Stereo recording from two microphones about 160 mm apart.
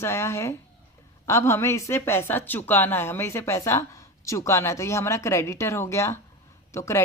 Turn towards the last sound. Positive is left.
turn(degrees=15)  # may be behind; listen again after turning